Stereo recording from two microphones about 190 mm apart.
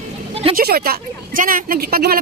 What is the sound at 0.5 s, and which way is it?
A woman's voice, 50° right (ahead or behind).